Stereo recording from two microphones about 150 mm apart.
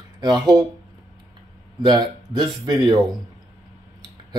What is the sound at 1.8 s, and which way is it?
Speech, 30° right (ahead or behind).